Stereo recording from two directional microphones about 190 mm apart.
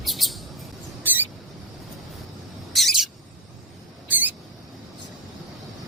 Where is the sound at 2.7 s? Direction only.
Centre (ahead or behind).